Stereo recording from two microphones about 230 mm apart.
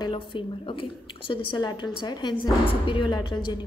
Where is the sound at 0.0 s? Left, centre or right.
Left.